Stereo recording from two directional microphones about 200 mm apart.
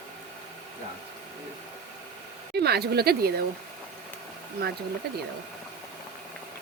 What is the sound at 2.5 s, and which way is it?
Speech, 55° right (ahead or behind).